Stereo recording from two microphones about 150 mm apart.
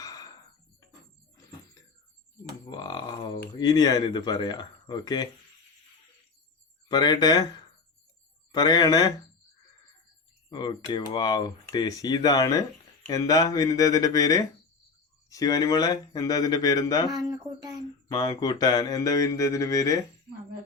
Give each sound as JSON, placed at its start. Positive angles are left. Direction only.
{"t": 0.0, "sound": "a sound", "side_deg": 25}
{"t": 2.6, "sound": "speech", "side_deg": 30}
{"t": 6.8, "sound": "speech", "side_deg": 30}
{"t": 10.5, "sound": "speech", "side_deg": 30}
{"t": 17.1, "sound": "speech", "side_deg": -25}
{"t": 18.1, "sound": "speech", "side_deg": 25}